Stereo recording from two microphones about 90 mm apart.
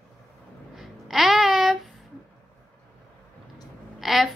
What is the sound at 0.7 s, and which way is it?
Babbling, centre (ahead or behind).